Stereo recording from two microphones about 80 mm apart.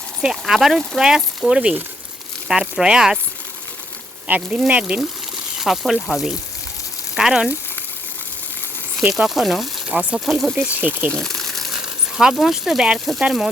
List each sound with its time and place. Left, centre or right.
0.2 s speech: centre
4.3 s speech: centre
5.5 s speech: centre
9.0 s speech: centre
9.9 s speech: centre
10.2 s speech: centre
10.5 s speech: centre
11.1 s gush: centre
11.8 s speech: centre